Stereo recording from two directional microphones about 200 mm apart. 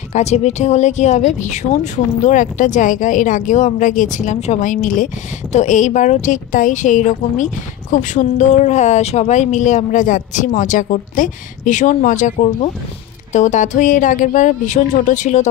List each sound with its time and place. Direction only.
0.1 s speech: 35° left (ahead or behind)